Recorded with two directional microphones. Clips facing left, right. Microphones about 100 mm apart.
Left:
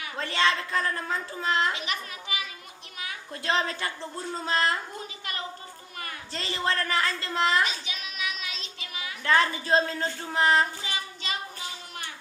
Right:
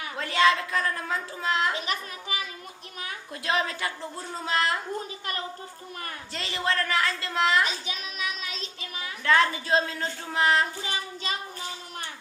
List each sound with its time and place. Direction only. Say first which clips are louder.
0.2 s a woman's voice: right 3 dB; 5° right (ahead or behind)
1.7 s a child's voice: right 2 dB; 40° right (ahead or behind)
3.3 s a woman's voice: even; 5° right (ahead or behind)
6.3 s a woman's voice: even; centre (ahead or behind)
7.6 s music: even; 35° right (ahead or behind)
9.2 s a woman's voice: right 1 dB; centre (ahead or behind)
10.8 s child singing: right 2 dB; 40° right (ahead or behind)